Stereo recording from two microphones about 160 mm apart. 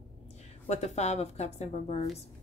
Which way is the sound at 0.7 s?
45° left (ahead or behind).